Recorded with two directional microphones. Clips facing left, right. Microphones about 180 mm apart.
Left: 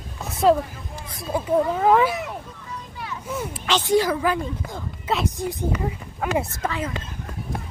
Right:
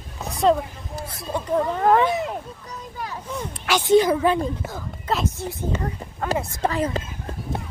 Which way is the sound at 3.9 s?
25° right (ahead or behind).